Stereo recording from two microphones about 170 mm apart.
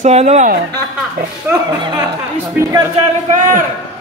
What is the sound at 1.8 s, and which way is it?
Speech, 25° right (ahead or behind).